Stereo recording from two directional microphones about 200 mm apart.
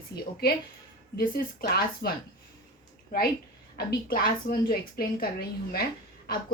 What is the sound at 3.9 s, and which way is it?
A woman's voice, 50° left (ahead or behind).